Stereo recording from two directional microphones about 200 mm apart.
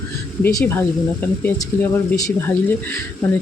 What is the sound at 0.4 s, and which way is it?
Speech, 10° left (ahead or behind).